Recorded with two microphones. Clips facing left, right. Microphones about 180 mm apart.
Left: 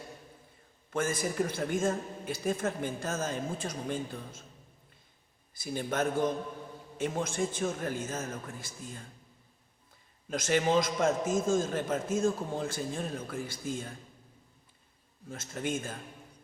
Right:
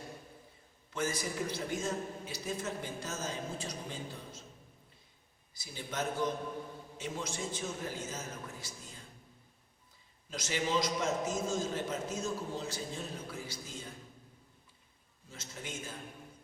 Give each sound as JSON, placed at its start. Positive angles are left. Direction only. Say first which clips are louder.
{"t": 0.9, "sound": "a man's voice", "louder": "left 5 dB", "side_deg": 50}
{"t": 5.5, "sound": "a man's voice", "louder": "left 7 dB", "side_deg": 55}
{"t": 10.2, "sound": "a man's voice", "louder": "left 8 dB", "side_deg": 55}
{"t": 15.3, "sound": "a man's voice", "louder": "left 11 dB", "side_deg": 50}